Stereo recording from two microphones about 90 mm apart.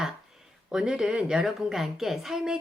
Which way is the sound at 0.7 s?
5° right (ahead or behind).